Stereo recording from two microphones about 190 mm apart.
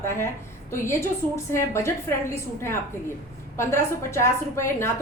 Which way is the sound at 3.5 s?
15° left (ahead or behind).